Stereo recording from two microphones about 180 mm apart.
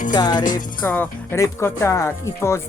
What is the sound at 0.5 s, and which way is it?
Speech, 10° left (ahead or behind).